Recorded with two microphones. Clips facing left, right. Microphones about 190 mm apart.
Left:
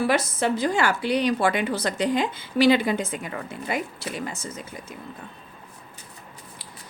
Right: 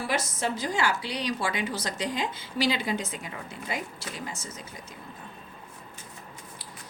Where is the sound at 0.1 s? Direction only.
65° left (ahead or behind).